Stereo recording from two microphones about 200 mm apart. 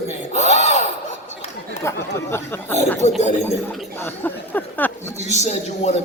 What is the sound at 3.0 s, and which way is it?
Speech, 35° left (ahead or behind).